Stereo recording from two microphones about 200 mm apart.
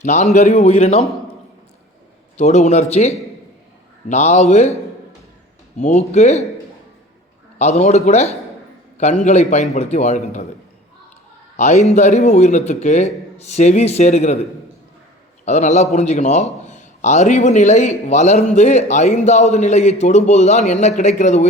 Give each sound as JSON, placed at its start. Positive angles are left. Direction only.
{"t": 0.0, "sound": "a man's voice", "side_deg": 35}
{"t": 2.4, "sound": "a man's voice", "side_deg": 35}
{"t": 5.8, "sound": "a man's voice", "side_deg": 30}
{"t": 7.6, "sound": "a man's voice", "side_deg": 35}
{"t": 11.5, "sound": "a man's voice", "side_deg": 35}
{"t": 15.4, "sound": "a man's voice", "side_deg": 35}